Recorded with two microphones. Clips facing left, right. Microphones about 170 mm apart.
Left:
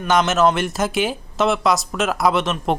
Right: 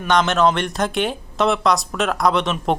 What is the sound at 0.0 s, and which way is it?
Speech, 5° left (ahead or behind).